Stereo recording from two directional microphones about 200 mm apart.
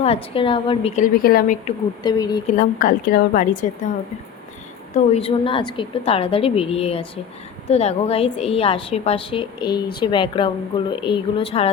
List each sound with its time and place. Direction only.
0.0 s a woman's voice: 30° left (ahead or behind); by 1.5 s 50° left (ahead or behind)
2.0 s a woman's voice: 20° left (ahead or behind)
2.5 s a woman's voice: 45° left (ahead or behind)
4.9 s a woman's voice: 30° left (ahead or behind)